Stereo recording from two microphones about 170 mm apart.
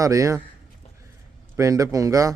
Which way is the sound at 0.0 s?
20° right (ahead or behind).